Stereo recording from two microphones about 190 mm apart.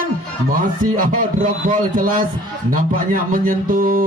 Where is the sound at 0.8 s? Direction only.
45° right (ahead or behind).